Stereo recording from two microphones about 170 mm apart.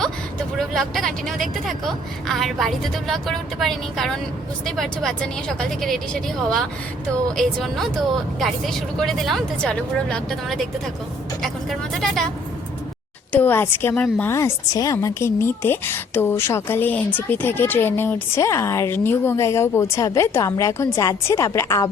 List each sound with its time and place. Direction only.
0.0 s speech: 5° left (ahead or behind)
13.3 s speech: 10° left (ahead or behind)